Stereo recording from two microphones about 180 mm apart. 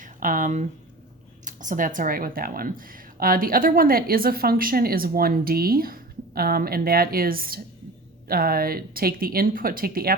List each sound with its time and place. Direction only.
0.0 s a woman's voice: 50° right (ahead or behind)